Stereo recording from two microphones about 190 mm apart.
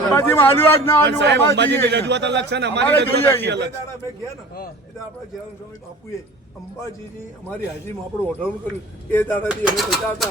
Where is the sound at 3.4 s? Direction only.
65° right (ahead or behind).